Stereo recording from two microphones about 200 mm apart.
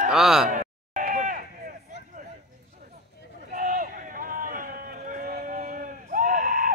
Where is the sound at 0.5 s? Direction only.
40° right (ahead or behind).